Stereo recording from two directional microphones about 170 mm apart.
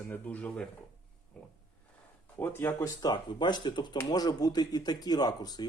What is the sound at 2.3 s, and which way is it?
Speech, 15° left (ahead or behind).